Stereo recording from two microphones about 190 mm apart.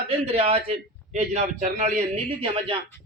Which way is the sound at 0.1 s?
30° right (ahead or behind).